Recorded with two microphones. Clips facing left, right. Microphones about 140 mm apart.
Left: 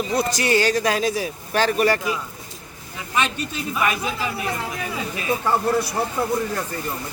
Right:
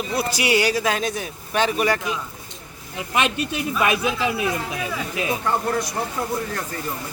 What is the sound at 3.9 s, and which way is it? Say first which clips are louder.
Speech: right 3 dB; 90° right.